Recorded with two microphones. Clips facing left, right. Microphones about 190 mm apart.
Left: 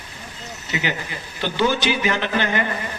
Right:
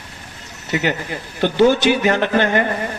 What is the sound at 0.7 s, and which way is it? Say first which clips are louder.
Speech: right 6 dB; 50° right (ahead or behind).